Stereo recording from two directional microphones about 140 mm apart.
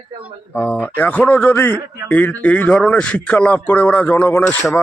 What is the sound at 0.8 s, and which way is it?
Speech, 10° left (ahead or behind).